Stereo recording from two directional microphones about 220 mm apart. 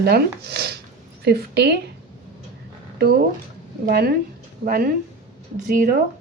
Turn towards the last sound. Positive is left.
turn(degrees=-40)  # may be behind; listen again after turning